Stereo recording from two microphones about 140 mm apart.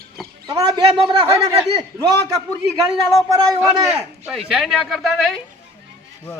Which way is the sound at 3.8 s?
20° right (ahead or behind).